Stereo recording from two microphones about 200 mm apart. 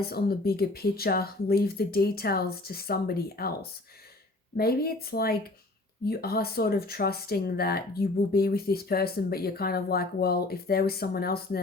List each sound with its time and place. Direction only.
0.0 s speech: 50° left (ahead or behind)